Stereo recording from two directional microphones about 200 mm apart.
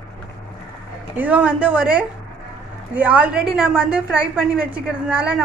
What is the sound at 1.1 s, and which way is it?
A woman's voice, 10° right (ahead or behind).